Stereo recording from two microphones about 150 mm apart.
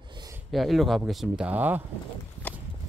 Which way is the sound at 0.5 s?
Centre (ahead or behind).